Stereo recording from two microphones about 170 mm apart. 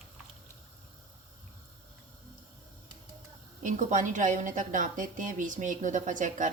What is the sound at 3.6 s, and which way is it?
A woman's voice, 50° right (ahead or behind).